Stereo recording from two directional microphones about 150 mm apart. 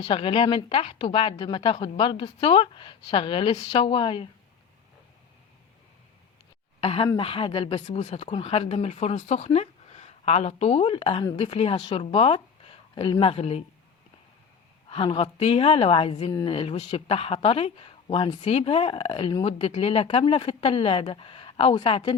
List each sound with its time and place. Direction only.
0.0 s speech: 35° left (ahead or behind)
6.8 s speech: 40° left (ahead or behind)
14.8 s speech: 35° left (ahead or behind)